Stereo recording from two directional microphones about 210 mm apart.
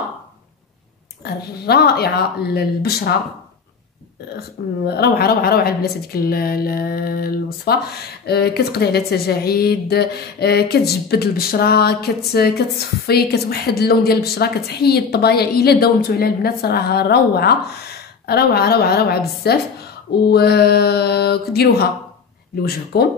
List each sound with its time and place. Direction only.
1.2 s a woman's voice: 50° left (ahead or behind)
4.8 s a woman's voice: 50° left (ahead or behind)